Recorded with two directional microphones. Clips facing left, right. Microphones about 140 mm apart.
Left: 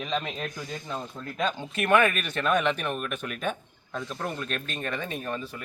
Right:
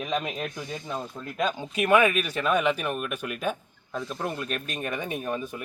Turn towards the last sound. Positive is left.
turn(degrees=-15)  # may be behind; listen again after turning